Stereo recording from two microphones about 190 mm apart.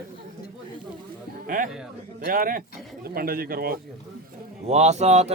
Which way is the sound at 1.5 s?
45° right (ahead or behind).